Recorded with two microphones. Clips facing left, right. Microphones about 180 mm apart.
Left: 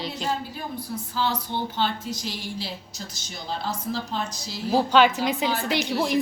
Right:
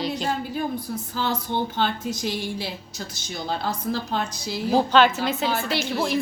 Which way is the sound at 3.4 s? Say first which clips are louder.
Right 3 dB; 60° right (ahead or behind).